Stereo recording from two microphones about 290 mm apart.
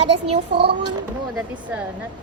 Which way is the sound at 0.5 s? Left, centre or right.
Right.